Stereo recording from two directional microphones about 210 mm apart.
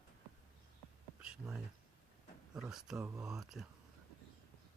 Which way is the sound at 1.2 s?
5° right (ahead or behind).